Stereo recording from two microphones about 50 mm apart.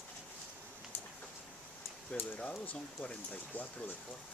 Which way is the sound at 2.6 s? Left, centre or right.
Left.